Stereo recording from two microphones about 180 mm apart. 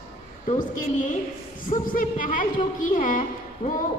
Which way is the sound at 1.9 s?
50° left (ahead or behind).